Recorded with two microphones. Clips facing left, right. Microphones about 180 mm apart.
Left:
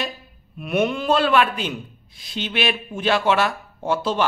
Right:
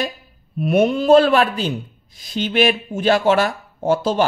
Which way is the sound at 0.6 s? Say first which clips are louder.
Right 5 dB; 35° right (ahead or behind).